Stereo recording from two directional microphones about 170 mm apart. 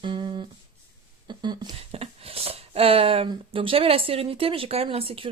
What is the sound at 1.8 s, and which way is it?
Speech, 35° right (ahead or behind).